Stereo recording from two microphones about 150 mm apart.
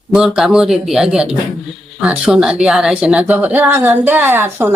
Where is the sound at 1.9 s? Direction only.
5° right (ahead or behind).